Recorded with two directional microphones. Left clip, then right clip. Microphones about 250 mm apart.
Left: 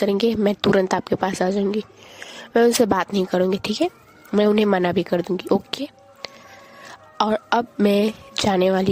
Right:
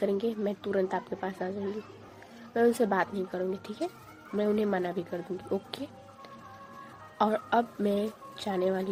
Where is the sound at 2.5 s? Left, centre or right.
Left.